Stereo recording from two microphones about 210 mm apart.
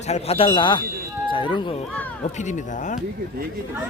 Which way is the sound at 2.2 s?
35° left (ahead or behind).